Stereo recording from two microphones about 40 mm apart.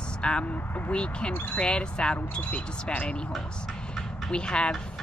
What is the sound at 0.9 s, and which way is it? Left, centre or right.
Speech, left.